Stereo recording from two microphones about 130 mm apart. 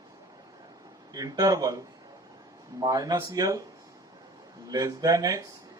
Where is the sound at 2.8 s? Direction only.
30° right (ahead or behind).